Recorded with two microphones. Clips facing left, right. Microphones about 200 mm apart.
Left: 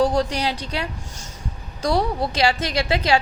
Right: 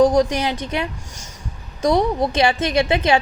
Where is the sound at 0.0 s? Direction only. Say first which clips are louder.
Right 5 dB; 15° right (ahead or behind).